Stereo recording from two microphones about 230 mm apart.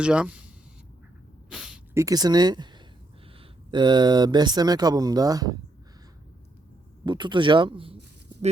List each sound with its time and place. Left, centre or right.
0.0 s speech: centre
1.5 s snort: centre
3.7 s speech: centre
7.0 s speech: centre